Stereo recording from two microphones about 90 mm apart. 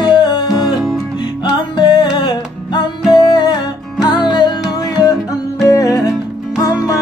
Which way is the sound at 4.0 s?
50° left (ahead or behind).